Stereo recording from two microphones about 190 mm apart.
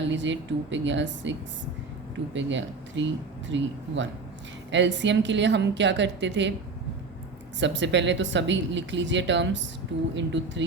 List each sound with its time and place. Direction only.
0.0 s speech: 75° right (ahead or behind)
7.6 s speech: 70° right (ahead or behind)